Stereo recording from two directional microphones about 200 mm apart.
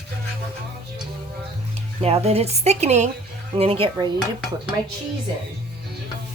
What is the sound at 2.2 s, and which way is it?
A woman's voice, 30° right (ahead or behind).